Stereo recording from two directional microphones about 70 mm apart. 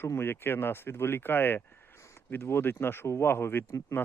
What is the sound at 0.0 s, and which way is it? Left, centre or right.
A man's voice, left.